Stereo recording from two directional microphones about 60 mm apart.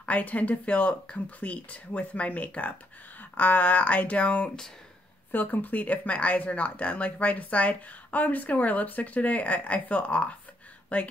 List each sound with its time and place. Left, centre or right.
0.0 s speech: left